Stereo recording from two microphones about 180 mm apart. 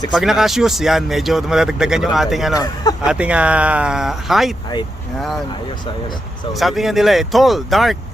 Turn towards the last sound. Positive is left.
turn(degrees=0)  # may be behind; listen again after turning